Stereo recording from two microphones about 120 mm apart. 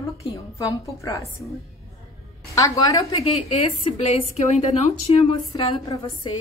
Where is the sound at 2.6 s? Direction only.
30° left (ahead or behind).